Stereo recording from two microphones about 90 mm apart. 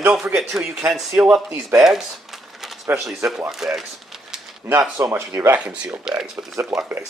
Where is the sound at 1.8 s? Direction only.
5° right (ahead or behind).